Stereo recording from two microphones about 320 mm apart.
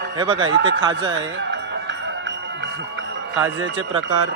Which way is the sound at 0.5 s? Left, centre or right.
Right.